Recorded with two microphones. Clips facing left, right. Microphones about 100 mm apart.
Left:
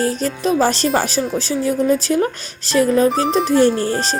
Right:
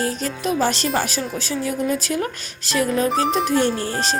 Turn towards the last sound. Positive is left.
turn(degrees=35)  # may be behind; listen again after turning